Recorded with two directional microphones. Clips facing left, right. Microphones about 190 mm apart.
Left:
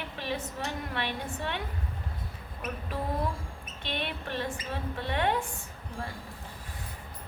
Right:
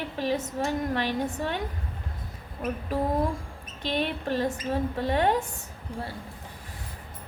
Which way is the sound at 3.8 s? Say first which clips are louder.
Right 7 dB; 40° right (ahead or behind).